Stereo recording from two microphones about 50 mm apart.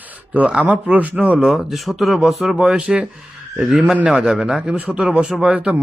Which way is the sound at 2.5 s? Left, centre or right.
Centre.